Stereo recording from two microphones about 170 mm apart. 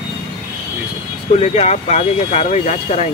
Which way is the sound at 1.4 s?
40° left (ahead or behind).